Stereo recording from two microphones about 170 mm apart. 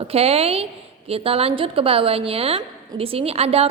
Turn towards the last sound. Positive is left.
turn(degrees=-35)  # may be behind; listen again after turning